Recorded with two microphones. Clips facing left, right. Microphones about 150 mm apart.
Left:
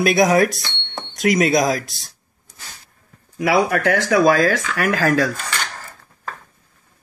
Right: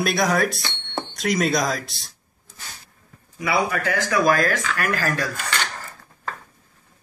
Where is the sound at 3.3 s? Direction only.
80° left.